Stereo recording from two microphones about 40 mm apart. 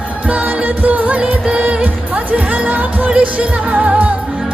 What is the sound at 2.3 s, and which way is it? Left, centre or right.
Music, right.